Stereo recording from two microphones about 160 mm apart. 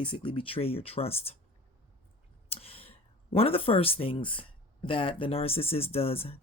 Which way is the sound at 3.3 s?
35° left (ahead or behind).